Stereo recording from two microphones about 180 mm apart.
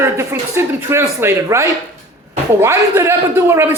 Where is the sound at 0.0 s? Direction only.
15° right (ahead or behind).